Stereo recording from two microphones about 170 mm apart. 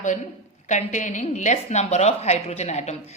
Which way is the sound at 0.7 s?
45° left (ahead or behind).